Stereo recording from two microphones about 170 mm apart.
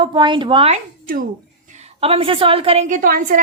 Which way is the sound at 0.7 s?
55° right (ahead or behind).